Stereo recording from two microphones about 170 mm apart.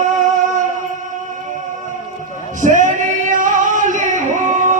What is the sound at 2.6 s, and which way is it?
Singing, 50° right (ahead or behind).